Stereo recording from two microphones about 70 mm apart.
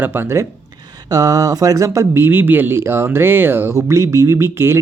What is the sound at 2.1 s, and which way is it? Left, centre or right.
Speech, right.